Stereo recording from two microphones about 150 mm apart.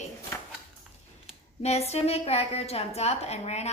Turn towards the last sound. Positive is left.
turn(degrees=45)  # may be behind; listen again after turning